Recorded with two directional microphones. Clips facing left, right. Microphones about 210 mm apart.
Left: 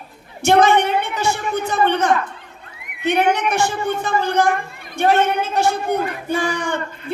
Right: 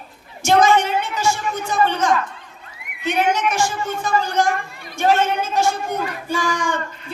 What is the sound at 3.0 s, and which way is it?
Speech, 60° left (ahead or behind).